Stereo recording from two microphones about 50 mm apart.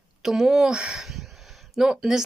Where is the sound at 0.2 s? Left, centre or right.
Centre.